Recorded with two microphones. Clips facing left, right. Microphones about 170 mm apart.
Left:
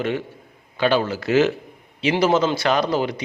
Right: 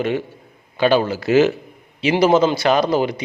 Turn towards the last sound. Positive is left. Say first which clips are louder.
# right 3 dB
turn(degrees=-15)  # may be behind; listen again after turning